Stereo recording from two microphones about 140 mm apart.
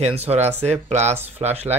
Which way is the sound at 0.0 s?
50° right (ahead or behind).